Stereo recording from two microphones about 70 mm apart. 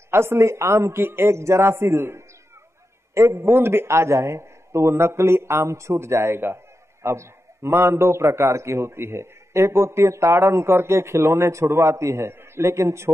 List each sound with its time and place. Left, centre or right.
0.1 s a man's voice: right